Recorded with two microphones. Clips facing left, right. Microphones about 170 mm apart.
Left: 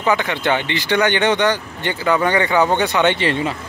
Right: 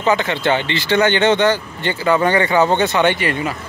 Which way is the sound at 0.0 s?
15° left (ahead or behind).